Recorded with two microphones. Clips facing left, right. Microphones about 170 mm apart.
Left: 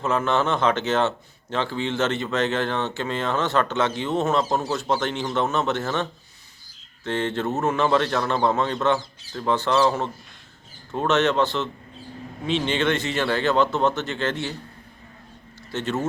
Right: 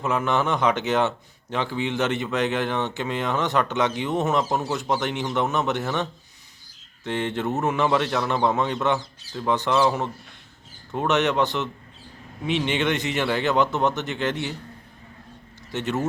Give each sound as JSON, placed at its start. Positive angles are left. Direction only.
{"t": 0.0, "sound": "a man's voice", "side_deg": -15}
{"t": 15.7, "sound": "a man's voice", "side_deg": -15}